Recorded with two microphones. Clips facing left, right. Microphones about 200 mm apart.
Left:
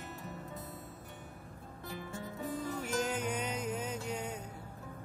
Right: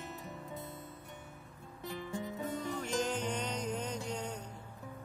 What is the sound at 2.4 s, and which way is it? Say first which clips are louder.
Music: left 4 dB; 5° left (ahead or behind).